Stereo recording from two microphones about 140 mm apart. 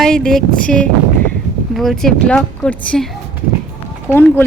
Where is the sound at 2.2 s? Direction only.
10° left (ahead or behind).